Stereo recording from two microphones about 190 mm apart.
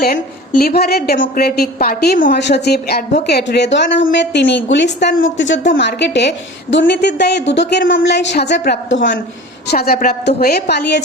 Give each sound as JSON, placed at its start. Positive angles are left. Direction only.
{"t": 0.0, "sound": "a woman's voice", "side_deg": 50}
{"t": 2.3, "sound": "a woman's voice", "side_deg": 60}
{"t": 9.6, "sound": "a woman's voice", "side_deg": 55}